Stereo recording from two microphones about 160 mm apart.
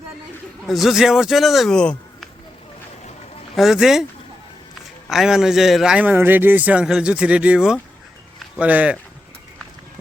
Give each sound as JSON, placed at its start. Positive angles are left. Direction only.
{"t": 0.7, "sound": "speech", "side_deg": 0}
{"t": 3.5, "sound": "speech", "side_deg": 0}
{"t": 5.0, "sound": "a man's voice", "side_deg": 0}